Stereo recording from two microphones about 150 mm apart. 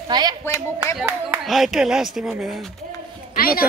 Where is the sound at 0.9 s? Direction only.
10° right (ahead or behind).